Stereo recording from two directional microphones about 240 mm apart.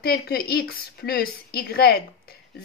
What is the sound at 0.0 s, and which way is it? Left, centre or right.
A woman's voice, left.